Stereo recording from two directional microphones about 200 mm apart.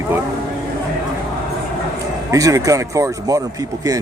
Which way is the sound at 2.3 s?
15° right (ahead or behind).